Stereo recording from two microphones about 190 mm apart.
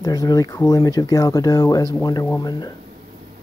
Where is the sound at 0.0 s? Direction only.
20° left (ahead or behind).